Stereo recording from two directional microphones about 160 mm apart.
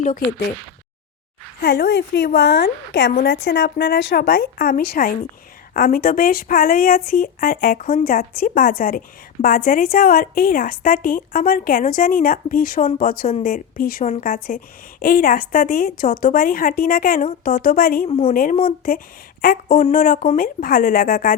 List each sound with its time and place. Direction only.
0.0 s a woman's voice: 55° left (ahead or behind)
1.6 s a woman's voice: 80° left